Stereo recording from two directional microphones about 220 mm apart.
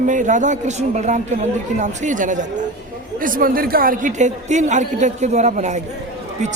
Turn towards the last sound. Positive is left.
turn(degrees=-30)  # may be behind; listen again after turning